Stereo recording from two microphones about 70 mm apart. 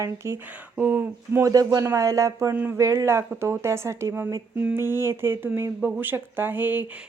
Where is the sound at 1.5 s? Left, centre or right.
Right.